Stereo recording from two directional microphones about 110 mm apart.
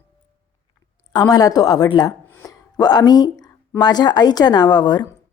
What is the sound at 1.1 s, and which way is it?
A woman's voice, 35° left (ahead or behind).